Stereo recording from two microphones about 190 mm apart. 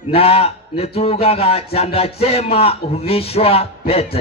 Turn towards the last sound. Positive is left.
turn(degrees=30)  # may be behind; listen again after turning